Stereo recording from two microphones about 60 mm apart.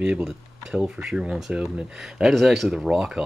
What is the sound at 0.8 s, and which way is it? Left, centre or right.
Speech, centre.